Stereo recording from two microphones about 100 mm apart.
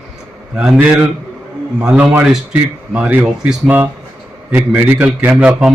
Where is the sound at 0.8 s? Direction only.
20° right (ahead or behind).